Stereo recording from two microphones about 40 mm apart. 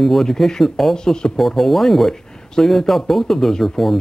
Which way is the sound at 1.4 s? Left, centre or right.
Centre.